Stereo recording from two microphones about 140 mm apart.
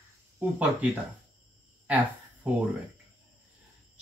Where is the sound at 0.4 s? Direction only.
10° right (ahead or behind).